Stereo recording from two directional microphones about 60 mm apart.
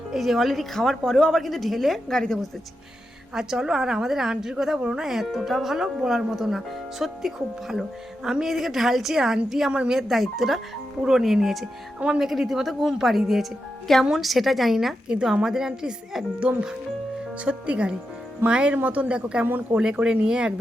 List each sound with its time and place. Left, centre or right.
0.1 s speech: centre
3.3 s speech: centre
11.9 s speech: centre
12.2 s speech: centre
14.0 s speech: centre
15.1 s speech: centre
16.4 s speech: right